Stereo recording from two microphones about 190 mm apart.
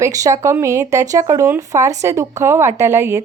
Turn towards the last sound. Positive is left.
turn(degrees=-10)  # may be behind; listen again after turning